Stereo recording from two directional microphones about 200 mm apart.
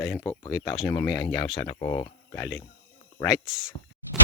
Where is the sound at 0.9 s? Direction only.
15° left (ahead or behind).